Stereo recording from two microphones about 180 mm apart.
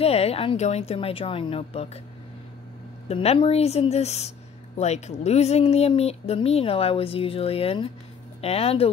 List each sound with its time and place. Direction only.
0.0 s speech: 35° left (ahead or behind)
3.1 s speech: 35° left (ahead or behind)